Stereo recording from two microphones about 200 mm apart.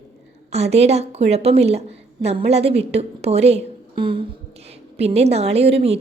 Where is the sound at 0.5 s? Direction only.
30° right (ahead or behind).